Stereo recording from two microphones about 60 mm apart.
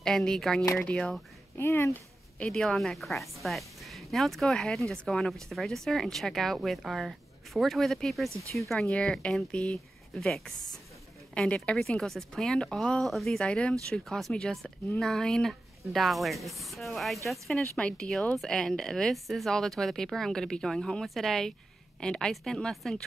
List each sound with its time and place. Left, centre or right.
0.0 s speech: centre
1.6 s speech: left
2.3 s a woman's voice: centre
8.8 s speech: centre
11.3 s speech: left
11.9 s a woman's voice: centre
13.3 s speech: centre
14.0 s a woman's voice: centre
17.7 s a woman's voice: centre